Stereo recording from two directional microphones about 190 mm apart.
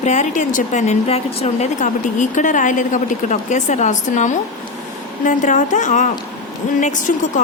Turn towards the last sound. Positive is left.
turn(degrees=40)  # may be behind; listen again after turning